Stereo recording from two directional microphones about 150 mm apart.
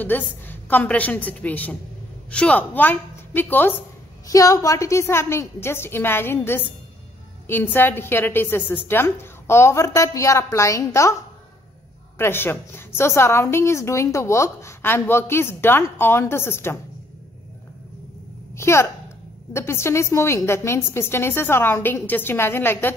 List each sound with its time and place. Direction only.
0.0 s a woman's voice: 10° left (ahead or behind)
12.2 s a woman's voice: 15° left (ahead or behind)
18.6 s a woman's voice: 15° left (ahead or behind)